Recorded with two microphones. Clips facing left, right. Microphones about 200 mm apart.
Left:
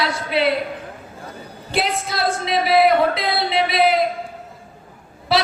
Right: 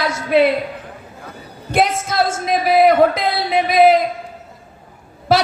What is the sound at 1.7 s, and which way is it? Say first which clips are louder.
Speech: right 5 dB; 45° right (ahead or behind).